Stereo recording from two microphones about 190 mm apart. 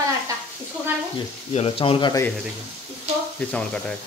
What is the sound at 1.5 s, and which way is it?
Speech, 30° left (ahead or behind).